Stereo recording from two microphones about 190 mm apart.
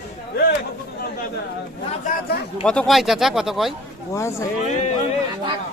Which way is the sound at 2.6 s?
5° left (ahead or behind).